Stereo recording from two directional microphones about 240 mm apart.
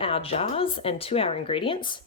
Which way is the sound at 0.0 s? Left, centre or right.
Left.